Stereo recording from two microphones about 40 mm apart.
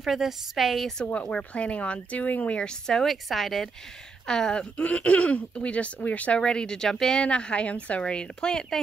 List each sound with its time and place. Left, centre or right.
0.0 s speech: centre
1.1 s speech: left
2.9 s speech: centre
4.3 s speech: centre; by 6.4 s left
6.4 s speech: left
7.2 s a woman's voice: left